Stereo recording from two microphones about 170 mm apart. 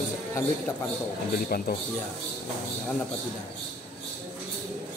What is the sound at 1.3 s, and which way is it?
Speech, 60° left (ahead or behind).